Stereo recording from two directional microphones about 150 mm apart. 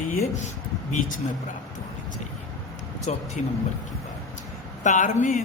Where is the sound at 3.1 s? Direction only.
50° left (ahead or behind).